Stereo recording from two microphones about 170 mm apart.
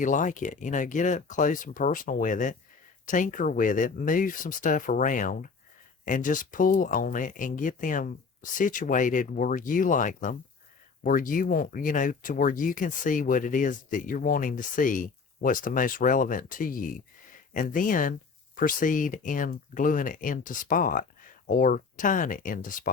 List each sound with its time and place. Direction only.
0.0 s speech: 50° left (ahead or behind)